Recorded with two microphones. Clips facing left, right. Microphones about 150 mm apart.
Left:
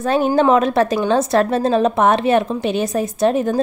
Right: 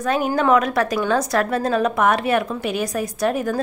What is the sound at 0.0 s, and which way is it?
A woman's voice, 30° left (ahead or behind).